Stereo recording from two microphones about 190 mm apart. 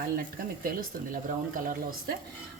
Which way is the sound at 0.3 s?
50° right (ahead or behind).